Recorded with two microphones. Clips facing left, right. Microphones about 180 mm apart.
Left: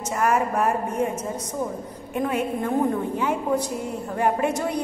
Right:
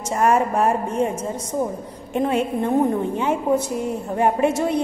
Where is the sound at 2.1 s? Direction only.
25° right (ahead or behind).